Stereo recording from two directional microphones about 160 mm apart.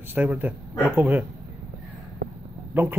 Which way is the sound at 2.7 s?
15° right (ahead or behind).